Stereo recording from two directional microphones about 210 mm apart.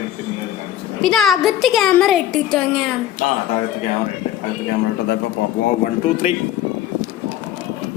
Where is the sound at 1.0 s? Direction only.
Centre (ahead or behind).